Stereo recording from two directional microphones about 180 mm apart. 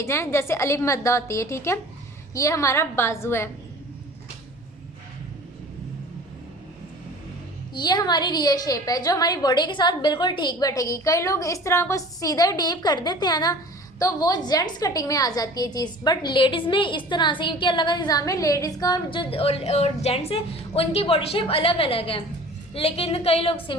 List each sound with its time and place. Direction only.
0.0 s speech: 15° left (ahead or behind)
7.7 s a woman's voice: 25° left (ahead or behind)